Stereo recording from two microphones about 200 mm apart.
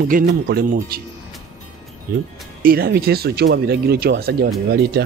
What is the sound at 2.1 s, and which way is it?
Speech, 45° right (ahead or behind).